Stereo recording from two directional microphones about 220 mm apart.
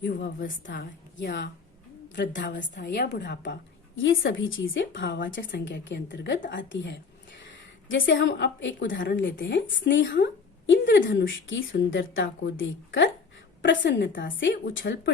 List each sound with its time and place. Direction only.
0.0 s a woman's voice: 40° left (ahead or behind)
0.7 s a woman's voice: 50° left (ahead or behind)